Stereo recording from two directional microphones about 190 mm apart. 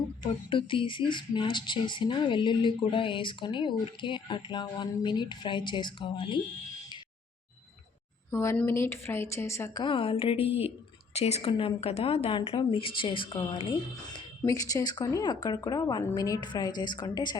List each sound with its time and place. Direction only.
0.2 s speech: 25° left (ahead or behind)
8.3 s a woman's voice: 15° left (ahead or behind)